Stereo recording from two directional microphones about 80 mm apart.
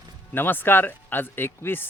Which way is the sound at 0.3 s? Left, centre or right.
Left.